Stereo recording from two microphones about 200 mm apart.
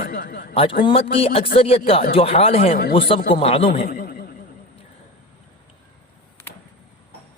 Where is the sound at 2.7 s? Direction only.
45° left (ahead or behind).